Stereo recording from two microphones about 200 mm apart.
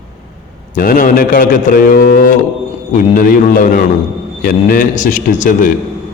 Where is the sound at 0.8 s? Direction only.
45° left (ahead or behind).